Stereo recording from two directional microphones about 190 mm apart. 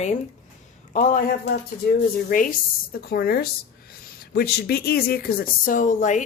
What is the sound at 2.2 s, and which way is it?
Speech, 45° left (ahead or behind).